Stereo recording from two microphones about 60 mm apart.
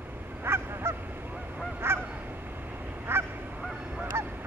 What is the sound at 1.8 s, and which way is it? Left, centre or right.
Honk, right.